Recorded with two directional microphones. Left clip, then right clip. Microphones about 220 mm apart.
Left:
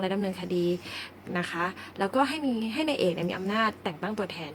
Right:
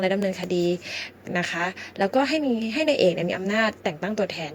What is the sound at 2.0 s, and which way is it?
Speech, 15° right (ahead or behind).